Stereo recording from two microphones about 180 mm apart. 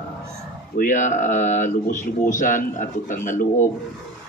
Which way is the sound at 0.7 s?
45° left (ahead or behind).